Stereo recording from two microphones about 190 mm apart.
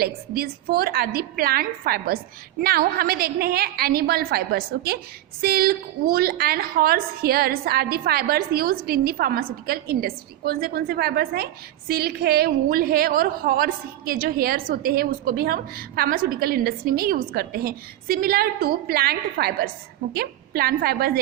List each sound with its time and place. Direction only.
0.0 s a woman's voice: 55° right (ahead or behind)